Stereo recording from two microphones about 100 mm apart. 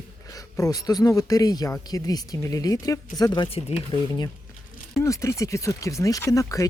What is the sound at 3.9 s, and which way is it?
Speech, 50° left (ahead or behind).